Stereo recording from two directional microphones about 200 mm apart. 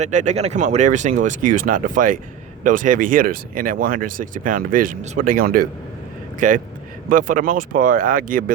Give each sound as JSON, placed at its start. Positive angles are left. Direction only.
{"t": 0.0, "sound": "speech", "side_deg": -35}